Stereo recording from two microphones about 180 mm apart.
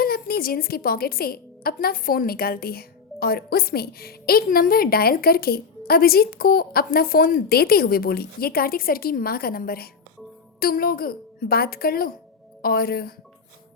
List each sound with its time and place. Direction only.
0.0 s a woman's voice: 55° left (ahead or behind)